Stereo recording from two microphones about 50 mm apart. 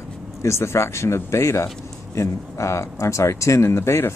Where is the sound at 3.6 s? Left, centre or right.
Left.